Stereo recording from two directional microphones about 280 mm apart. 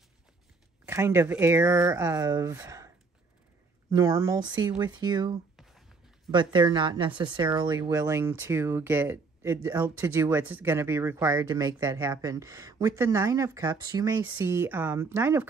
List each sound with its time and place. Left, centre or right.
0.8 s speech: centre
3.9 s speech: centre
5.6 s a sound: centre
6.5 s speech: centre